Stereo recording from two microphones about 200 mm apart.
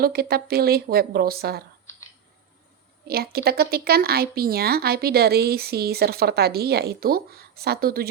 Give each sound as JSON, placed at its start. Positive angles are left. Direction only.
{"t": 0.0, "sound": "a woman's voice", "side_deg": -50}
{"t": 3.1, "sound": "a woman's voice", "side_deg": -50}